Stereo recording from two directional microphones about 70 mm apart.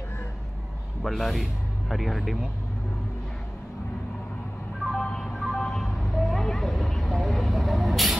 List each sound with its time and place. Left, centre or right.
1.0 s speech: centre
5.0 s music: centre